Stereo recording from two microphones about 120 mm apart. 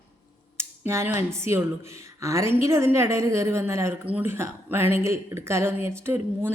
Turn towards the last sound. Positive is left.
turn(degrees=-20)  # may be behind; listen again after turning